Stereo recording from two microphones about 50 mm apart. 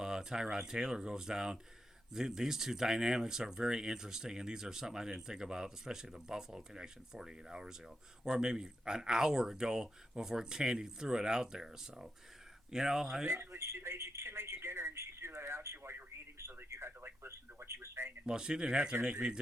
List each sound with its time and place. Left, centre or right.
0.0 s speech: centre
13.2 s speech: right
16.4 s a sound: right
18.3 s speech: centre